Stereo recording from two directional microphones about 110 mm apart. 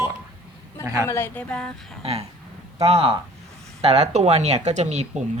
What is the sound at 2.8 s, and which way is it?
Speech, 60° right (ahead or behind).